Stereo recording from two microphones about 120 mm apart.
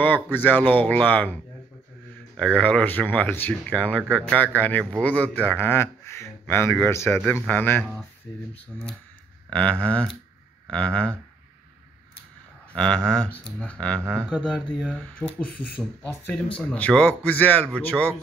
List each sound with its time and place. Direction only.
0.0 s speech: 15° left (ahead or behind)
12.7 s speech: 10° left (ahead or behind)
14.2 s speech: 10° right (ahead or behind)
15.2 s speech: 25° right (ahead or behind)
16.5 s speech: 10° left (ahead or behind)